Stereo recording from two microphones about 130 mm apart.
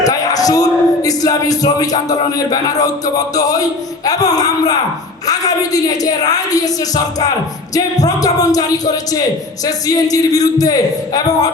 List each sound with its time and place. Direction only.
0.0 s a woman's voice: 30° left (ahead or behind)
9.6 s a woman's voice: 30° left (ahead or behind)